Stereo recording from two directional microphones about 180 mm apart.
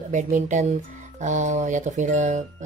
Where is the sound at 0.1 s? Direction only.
45° right (ahead or behind).